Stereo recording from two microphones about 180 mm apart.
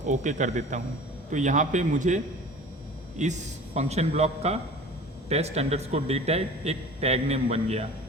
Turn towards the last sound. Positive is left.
turn(degrees=-35)  # may be behind; listen again after turning